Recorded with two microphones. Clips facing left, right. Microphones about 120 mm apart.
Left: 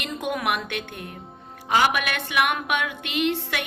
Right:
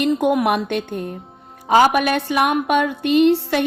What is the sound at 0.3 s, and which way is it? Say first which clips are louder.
Music: right 8 dB; 40° right (ahead or behind).